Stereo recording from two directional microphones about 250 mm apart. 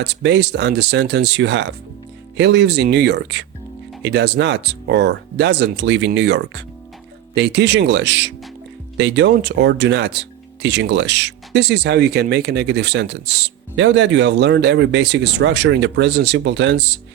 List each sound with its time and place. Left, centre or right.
0.0 s speech: right